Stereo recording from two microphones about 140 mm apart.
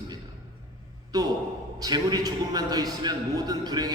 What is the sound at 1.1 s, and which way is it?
A man's voice, 25° right (ahead or behind).